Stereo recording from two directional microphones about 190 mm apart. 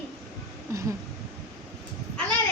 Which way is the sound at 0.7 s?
15° right (ahead or behind).